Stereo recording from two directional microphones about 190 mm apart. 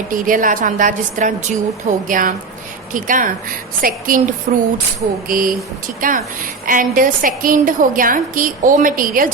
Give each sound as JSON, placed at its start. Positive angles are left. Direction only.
{"t": 0.1, "sound": "a woman's voice", "side_deg": -45}